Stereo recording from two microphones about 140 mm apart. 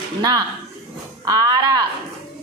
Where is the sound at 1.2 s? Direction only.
25° right (ahead or behind).